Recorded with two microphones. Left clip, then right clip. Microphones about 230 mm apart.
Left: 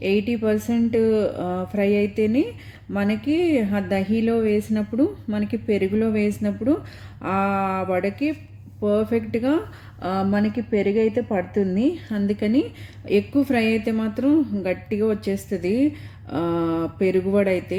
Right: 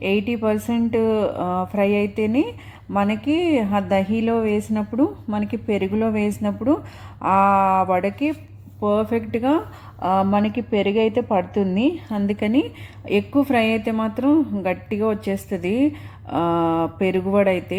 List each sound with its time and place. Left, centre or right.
0.0 s speech: centre
10.6 s a woman's voice: right
12.3 s speech: centre